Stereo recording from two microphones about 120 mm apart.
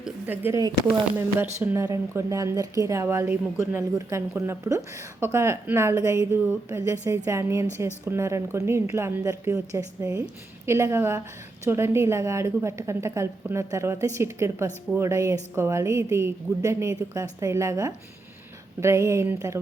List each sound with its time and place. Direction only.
0.3 s speech: 20° right (ahead or behind)